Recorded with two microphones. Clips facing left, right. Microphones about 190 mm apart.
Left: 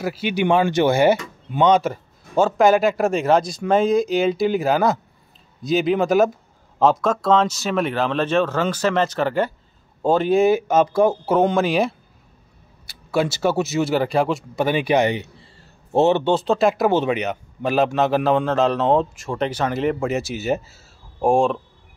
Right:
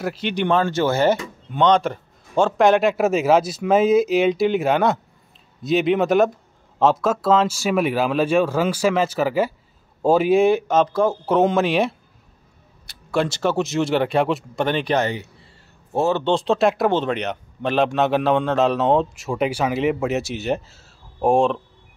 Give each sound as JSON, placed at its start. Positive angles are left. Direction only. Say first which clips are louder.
{"t": 0.0, "sound": "speech", "louder": "left 2 dB", "side_deg": 5}
{"t": 11.3, "sound": "speech", "louder": "right 2 dB", "side_deg": 0}
{"t": 16.3, "sound": "speech", "louder": "even", "side_deg": 0}